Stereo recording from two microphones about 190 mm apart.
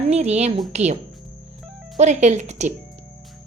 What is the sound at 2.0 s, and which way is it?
Speech, 35° right (ahead or behind).